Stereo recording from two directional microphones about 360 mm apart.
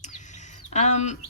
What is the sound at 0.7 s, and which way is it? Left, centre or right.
Speech, centre.